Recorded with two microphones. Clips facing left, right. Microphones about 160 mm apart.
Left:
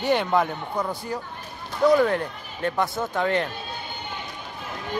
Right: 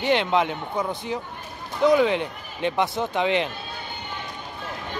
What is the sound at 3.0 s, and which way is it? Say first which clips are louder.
Speech: right 2 dB; 20° right (ahead or behind).